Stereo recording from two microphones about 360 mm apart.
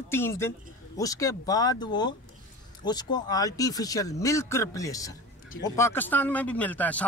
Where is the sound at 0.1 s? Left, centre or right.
Centre.